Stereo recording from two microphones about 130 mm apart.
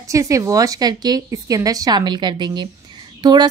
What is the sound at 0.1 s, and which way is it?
A woman's voice, 25° right (ahead or behind).